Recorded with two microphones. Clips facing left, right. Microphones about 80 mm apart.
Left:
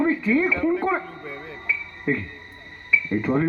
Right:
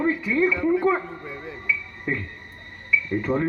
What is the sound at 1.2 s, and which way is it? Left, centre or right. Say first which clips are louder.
Music: even; centre.